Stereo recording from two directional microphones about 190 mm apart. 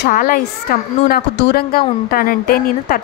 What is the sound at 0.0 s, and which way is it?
Speech, 50° left (ahead or behind).